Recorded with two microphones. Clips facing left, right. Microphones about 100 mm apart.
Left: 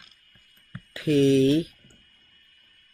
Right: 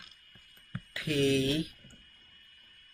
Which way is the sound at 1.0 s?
25° left (ahead or behind).